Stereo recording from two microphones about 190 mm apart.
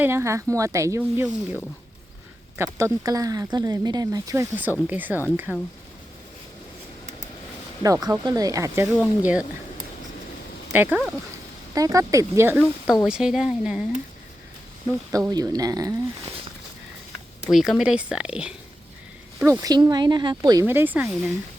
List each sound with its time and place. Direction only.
0.0 s a woman's voice: 15° right (ahead or behind)
7.8 s speech: 20° right (ahead or behind)
10.7 s speech: 10° right (ahead or behind)
11.7 s a woman's voice: 15° right (ahead or behind)
15.1 s speech: 20° right (ahead or behind)
17.4 s a woman's voice: centre (ahead or behind)